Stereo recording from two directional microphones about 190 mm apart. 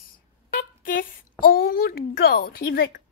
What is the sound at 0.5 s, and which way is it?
Speech, 45° left (ahead or behind).